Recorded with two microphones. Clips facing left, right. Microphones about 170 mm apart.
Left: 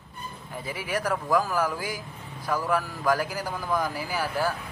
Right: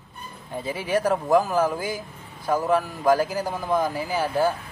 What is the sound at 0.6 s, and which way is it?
A man's voice, 25° right (ahead or behind).